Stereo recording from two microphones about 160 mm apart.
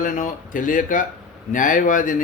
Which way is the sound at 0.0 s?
55° left (ahead or behind).